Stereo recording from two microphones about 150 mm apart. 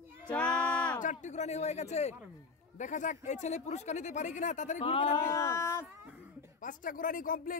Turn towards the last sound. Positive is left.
turn(degrees=70)  # may be behind; listen again after turning